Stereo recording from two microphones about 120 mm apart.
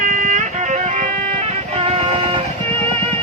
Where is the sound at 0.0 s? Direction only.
90° right; by 2.4 s 55° right (ahead or behind).